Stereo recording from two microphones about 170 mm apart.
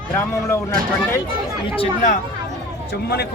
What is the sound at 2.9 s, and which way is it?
Speech, 70° left (ahead or behind).